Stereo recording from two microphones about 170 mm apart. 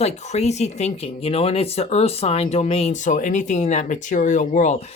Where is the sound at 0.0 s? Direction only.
40° left (ahead or behind).